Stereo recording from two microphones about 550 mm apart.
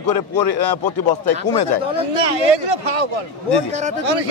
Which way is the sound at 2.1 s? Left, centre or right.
Right.